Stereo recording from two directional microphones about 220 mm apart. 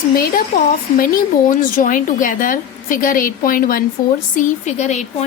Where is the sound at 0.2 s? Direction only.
45° left (ahead or behind).